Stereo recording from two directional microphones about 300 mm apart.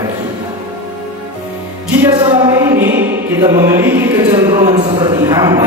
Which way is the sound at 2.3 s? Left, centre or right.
Centre.